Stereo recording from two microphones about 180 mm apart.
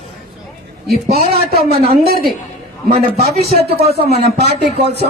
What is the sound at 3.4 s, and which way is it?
Speech, 60° right (ahead or behind).